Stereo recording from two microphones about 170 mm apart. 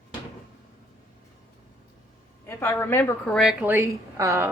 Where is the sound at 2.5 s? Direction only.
15° left (ahead or behind).